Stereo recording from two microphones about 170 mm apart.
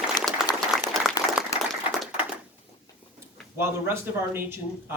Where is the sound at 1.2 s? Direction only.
20° left (ahead or behind).